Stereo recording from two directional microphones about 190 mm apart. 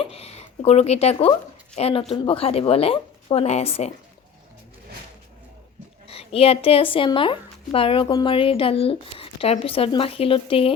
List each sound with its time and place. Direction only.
0.0 s a sound: 30° left (ahead or behind)
1.7 s speech: 30° left (ahead or behind)
6.1 s speech: 30° left (ahead or behind)